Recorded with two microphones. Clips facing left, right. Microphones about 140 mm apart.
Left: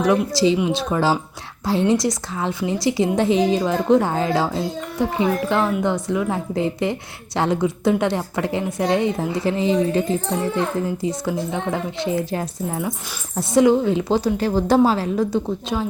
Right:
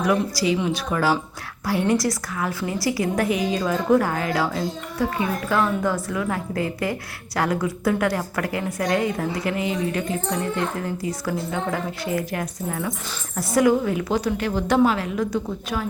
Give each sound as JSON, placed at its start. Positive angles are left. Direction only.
{"t": 0.0, "sound": "a woman's voice", "side_deg": 25}